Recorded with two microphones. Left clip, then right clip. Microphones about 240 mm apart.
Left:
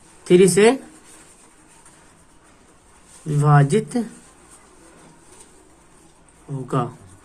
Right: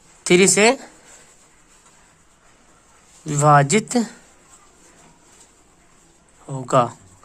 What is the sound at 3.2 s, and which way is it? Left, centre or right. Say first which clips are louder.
Speech: right 5 dB; right.